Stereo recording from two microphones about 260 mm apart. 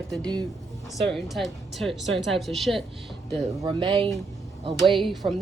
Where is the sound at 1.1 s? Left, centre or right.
Centre.